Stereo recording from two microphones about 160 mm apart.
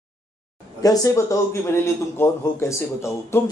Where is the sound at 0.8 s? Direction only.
20° left (ahead or behind).